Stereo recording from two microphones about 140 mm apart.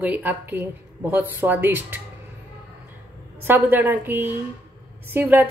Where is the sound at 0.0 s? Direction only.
15° right (ahead or behind).